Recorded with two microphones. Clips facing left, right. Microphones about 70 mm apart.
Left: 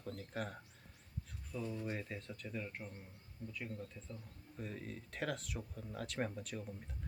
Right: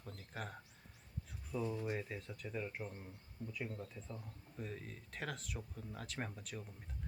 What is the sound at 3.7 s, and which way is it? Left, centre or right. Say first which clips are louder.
Speech: even; right.